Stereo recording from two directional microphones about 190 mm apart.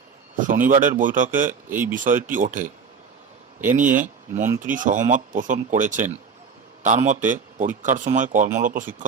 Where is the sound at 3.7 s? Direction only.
45° right (ahead or behind).